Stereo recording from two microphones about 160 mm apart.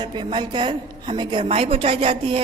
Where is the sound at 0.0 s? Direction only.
30° right (ahead or behind).